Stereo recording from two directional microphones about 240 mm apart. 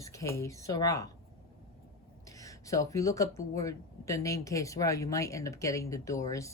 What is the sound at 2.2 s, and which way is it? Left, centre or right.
Speech, centre.